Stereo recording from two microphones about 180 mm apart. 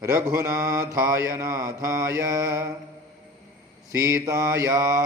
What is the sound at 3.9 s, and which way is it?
Mantra, 15° right (ahead or behind).